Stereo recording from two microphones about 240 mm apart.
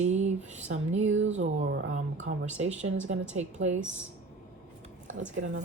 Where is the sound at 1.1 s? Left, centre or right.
Right.